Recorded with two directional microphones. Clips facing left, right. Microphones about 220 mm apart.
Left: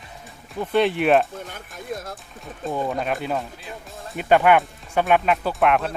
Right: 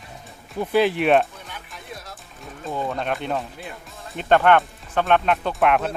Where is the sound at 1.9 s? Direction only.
45° left (ahead or behind).